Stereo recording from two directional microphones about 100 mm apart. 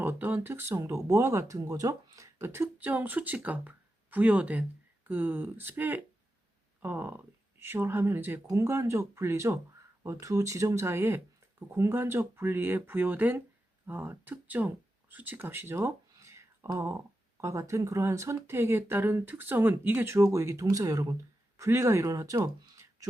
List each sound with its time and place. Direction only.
0.0 s speech: 20° right (ahead or behind)